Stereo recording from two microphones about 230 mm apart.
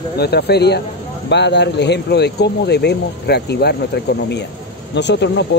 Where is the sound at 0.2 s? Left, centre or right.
Left.